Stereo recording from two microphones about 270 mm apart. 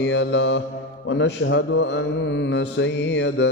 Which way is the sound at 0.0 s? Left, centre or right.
Left.